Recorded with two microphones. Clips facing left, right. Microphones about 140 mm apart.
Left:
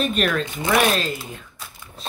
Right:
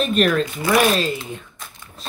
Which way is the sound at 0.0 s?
Centre (ahead or behind).